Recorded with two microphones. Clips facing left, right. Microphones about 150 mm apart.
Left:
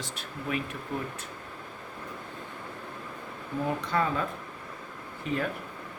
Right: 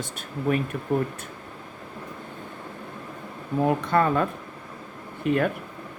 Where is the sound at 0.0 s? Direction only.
45° right (ahead or behind).